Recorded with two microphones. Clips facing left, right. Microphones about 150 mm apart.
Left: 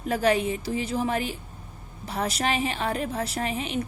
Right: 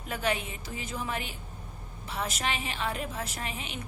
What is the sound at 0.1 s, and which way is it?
A woman's voice, 35° left (ahead or behind).